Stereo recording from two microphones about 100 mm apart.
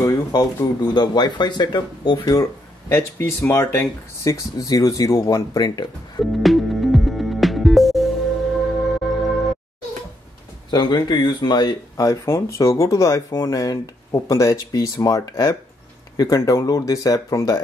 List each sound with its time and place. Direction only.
0.3 s speech: 45° left (ahead or behind)
2.9 s speech: 25° left (ahead or behind)
4.2 s speech: 35° left (ahead or behind)
6.3 s music: centre (ahead or behind)
10.7 s speech: 45° left (ahead or behind)
12.1 s speech: 30° left (ahead or behind)